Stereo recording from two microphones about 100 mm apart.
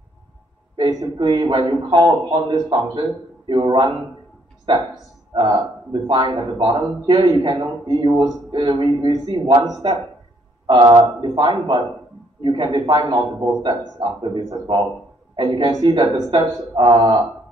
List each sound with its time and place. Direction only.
0.7 s a man's voice: 50° right (ahead or behind)
10.7 s a man's voice: 45° right (ahead or behind)